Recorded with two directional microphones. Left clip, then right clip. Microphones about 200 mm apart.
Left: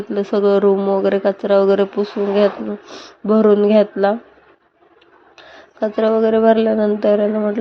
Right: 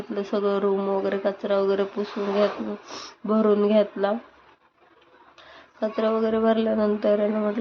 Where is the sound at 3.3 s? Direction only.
25° left (ahead or behind).